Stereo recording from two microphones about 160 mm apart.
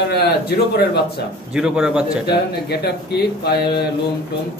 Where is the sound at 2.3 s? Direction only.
85° left.